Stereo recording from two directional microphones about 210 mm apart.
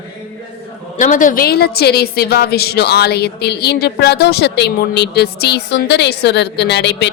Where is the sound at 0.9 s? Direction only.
40° left (ahead or behind).